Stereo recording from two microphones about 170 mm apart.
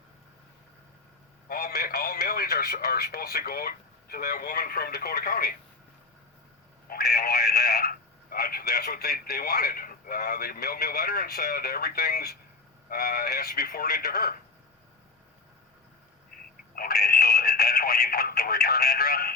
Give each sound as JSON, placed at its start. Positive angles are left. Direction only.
{"t": 1.5, "sound": "speech", "side_deg": 65}
{"t": 6.8, "sound": "speech", "side_deg": 65}
{"t": 16.7, "sound": "speech", "side_deg": 65}